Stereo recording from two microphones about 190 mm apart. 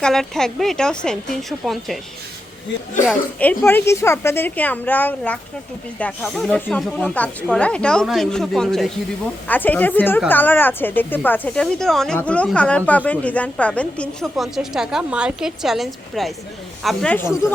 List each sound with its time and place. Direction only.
0.0 s a woman's voice: centre (ahead or behind)
3.1 s a woman's voice: 5° left (ahead or behind)